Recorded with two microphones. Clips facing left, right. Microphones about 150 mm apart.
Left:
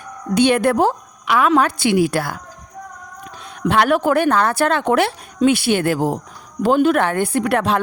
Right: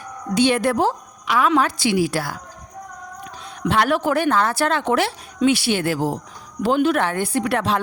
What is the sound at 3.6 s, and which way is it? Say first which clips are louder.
A woman's voice: left 3 dB; 55° left (ahead or behind).